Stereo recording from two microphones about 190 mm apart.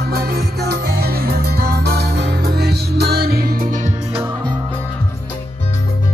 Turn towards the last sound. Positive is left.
turn(degrees=-40)  # may be behind; listen again after turning